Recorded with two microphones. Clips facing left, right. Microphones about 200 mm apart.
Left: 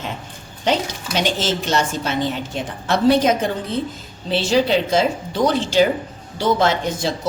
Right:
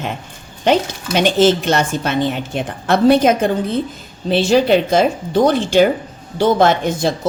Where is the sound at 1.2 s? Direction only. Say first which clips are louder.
Right 8 dB; 60° right (ahead or behind).